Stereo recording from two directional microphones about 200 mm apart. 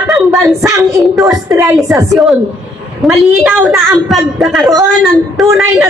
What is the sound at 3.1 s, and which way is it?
A woman's voice, 5° right (ahead or behind).